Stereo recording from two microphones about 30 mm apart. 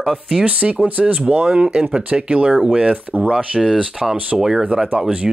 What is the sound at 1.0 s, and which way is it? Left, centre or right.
Speech, right.